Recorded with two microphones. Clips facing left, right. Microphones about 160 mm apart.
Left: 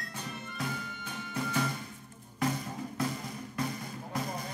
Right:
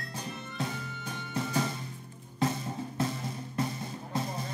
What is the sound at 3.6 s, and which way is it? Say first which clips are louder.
Music: right 2 dB; 25° right (ahead or behind).